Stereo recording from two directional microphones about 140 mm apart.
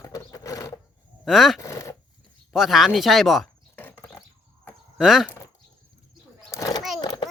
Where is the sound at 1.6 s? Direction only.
20° left (ahead or behind).